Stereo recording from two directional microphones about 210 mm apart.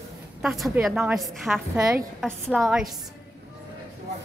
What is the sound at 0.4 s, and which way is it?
A woman's voice, centre (ahead or behind).